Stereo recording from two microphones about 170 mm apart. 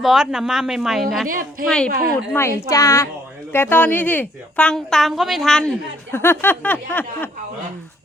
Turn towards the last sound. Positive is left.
turn(degrees=10)  # may be behind; listen again after turning